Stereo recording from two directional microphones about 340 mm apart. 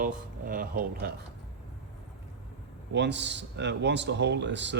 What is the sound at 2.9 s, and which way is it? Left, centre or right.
A man's voice, right.